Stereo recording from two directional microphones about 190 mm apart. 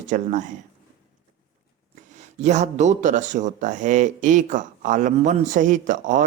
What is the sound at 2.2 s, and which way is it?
A man's voice, 40° right (ahead or behind).